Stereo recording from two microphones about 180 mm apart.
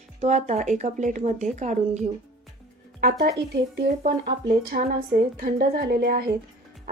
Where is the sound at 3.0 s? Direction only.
60° right (ahead or behind).